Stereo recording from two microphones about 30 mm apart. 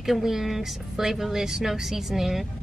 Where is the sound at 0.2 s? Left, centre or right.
Centre.